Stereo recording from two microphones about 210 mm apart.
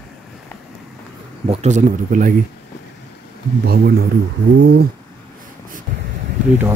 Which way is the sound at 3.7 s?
50° right (ahead or behind).